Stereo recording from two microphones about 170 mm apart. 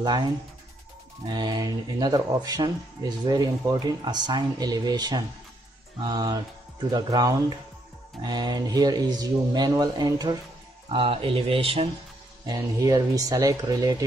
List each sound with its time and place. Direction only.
0.0 s speech: 25° right (ahead or behind)
1.3 s speech: 25° right (ahead or behind)
12.4 s speech: 20° right (ahead or behind)